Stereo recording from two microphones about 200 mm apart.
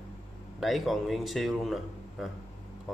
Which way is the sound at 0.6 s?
Centre (ahead or behind).